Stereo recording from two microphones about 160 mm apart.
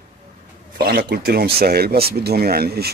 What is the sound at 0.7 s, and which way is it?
Speech, 75° right (ahead or behind).